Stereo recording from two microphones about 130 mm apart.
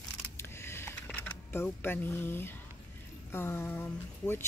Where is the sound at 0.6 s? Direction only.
20° left (ahead or behind).